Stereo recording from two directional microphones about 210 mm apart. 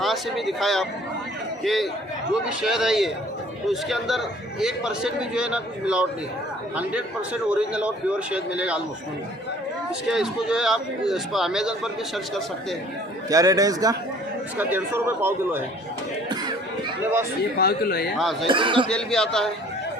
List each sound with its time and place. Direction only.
0.0 s a man's voice: centre (ahead or behind)
7.5 s a man's voice: 5° right (ahead or behind)
10.1 s a man's voice: 5° right (ahead or behind)
13.3 s a man's voice: 15° right (ahead or behind)
17.6 s speech: 45° left (ahead or behind)
18.2 s a man's voice: centre (ahead or behind)
18.4 s speech: 25° right (ahead or behind)
18.9 s a man's voice: 5° left (ahead or behind)